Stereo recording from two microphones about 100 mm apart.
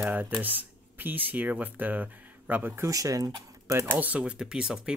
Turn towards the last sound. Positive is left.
turn(degrees=-10)  # may be behind; listen again after turning